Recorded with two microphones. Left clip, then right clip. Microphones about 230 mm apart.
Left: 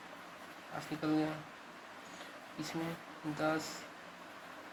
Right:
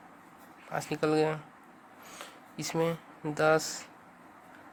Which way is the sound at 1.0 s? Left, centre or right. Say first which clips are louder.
Right 8 dB; right.